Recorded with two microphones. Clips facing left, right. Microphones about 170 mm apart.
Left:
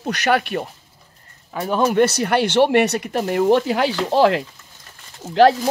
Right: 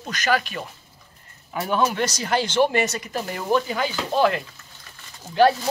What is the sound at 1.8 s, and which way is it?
Speech, 55° left (ahead or behind).